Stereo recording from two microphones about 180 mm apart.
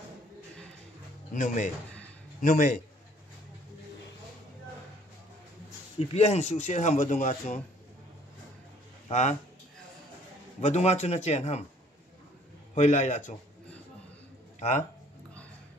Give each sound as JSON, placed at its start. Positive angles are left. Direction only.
{"t": 1.3, "sound": "speech", "side_deg": 45}
{"t": 5.9, "sound": "speech", "side_deg": 35}
{"t": 9.1, "sound": "speech", "side_deg": 40}
{"t": 10.6, "sound": "speech", "side_deg": 40}
{"t": 12.7, "sound": "speech", "side_deg": 40}